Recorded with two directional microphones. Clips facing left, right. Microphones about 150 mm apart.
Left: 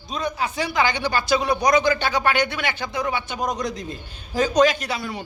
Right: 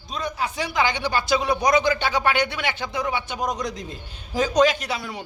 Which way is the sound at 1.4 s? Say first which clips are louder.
Left 1 dB; 5° right (ahead or behind).